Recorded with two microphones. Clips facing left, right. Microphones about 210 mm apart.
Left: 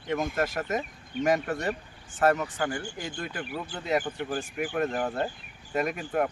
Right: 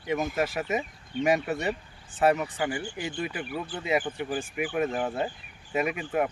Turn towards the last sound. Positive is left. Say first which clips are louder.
# even
turn(degrees=-5)  # may be behind; listen again after turning